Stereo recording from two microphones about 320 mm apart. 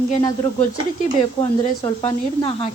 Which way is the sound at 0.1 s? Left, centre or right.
Centre.